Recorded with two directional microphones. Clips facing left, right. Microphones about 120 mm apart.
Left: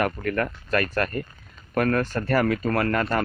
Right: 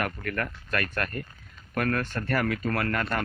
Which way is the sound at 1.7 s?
25° left (ahead or behind).